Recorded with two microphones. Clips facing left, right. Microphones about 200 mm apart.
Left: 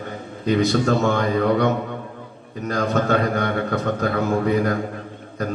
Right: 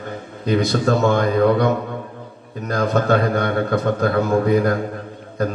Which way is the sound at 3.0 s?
35° right (ahead or behind).